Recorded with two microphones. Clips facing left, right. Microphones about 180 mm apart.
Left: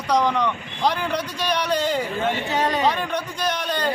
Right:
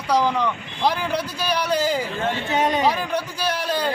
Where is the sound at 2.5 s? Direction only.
20° right (ahead or behind).